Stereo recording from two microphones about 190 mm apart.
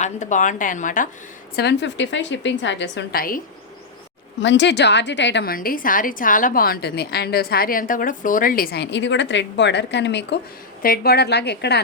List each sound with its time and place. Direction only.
0.0 s a woman's voice: 40° left (ahead or behind)
1.5 s a woman's voice: 65° left (ahead or behind); by 3.4 s 50° left (ahead or behind)
4.4 s a woman's voice: 70° left (ahead or behind)
10.8 s a woman's voice: 55° left (ahead or behind)